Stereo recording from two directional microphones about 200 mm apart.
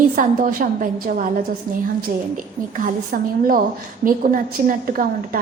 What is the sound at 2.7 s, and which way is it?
A woman's voice, 45° right (ahead or behind).